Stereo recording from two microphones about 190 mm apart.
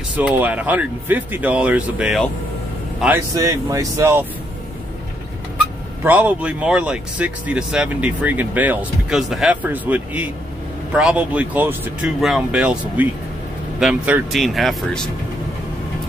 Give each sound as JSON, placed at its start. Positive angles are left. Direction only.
{"t": 0.2, "sound": "speech", "side_deg": -10}
{"t": 3.3, "sound": "speech", "side_deg": -15}
{"t": 6.0, "sound": "speech", "side_deg": -10}